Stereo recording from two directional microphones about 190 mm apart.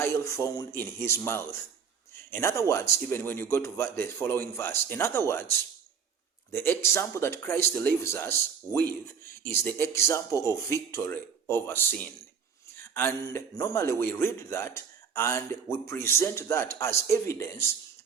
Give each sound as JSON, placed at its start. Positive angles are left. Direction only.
{"t": 0.0, "sound": "speech", "side_deg": 15}